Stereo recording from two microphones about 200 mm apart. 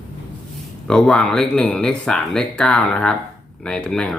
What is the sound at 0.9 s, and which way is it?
Speech, 5° left (ahead or behind).